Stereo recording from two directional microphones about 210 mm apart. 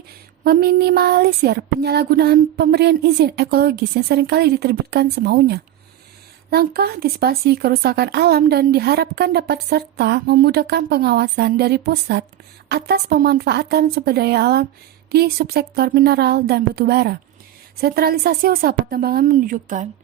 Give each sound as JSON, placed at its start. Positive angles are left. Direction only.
{"t": 0.4, "sound": "speech", "side_deg": -45}